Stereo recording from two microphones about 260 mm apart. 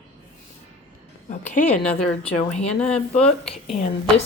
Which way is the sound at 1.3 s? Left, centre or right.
Left.